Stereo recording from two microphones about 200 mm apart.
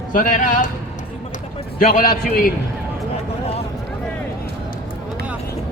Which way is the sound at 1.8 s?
45° left (ahead or behind).